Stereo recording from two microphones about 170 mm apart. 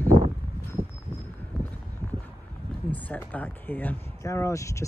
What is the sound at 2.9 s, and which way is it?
Speech, 10° left (ahead or behind).